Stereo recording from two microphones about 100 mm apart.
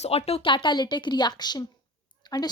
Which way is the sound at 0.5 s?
50° left (ahead or behind).